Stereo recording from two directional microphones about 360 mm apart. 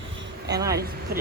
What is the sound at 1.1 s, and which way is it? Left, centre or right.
Speech, right.